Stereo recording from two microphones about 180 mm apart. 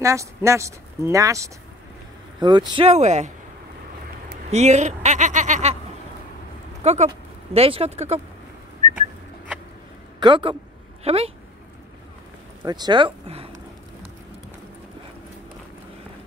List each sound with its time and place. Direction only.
0.0 s speech: 15° right (ahead or behind); by 3.3 s 40° right (ahead or behind)
4.5 s speech: 40° right (ahead or behind)
6.8 s speech: 35° right (ahead or behind)
8.8 s whistling: 45° right (ahead or behind)
10.2 s speech: 25° right (ahead or behind)
12.6 s speech: 20° right (ahead or behind)